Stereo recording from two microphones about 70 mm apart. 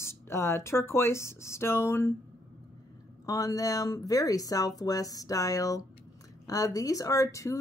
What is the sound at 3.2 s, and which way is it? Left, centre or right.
Speech, left.